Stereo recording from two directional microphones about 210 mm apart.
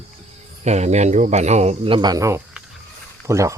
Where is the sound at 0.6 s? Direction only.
30° right (ahead or behind).